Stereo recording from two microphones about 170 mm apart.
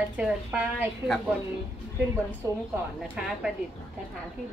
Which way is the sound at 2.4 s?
20° right (ahead or behind).